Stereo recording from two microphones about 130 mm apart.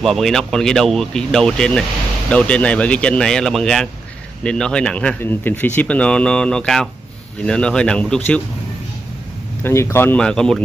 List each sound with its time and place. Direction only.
0.0 s speech: centre (ahead or behind)
9.6 s speech: 20° left (ahead or behind)
10.1 s speech: 5° left (ahead or behind)